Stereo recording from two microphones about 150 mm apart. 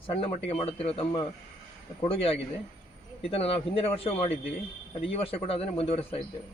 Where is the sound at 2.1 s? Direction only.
40° left (ahead or behind).